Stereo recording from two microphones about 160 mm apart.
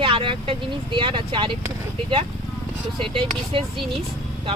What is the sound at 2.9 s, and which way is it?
Speech, 30° right (ahead or behind).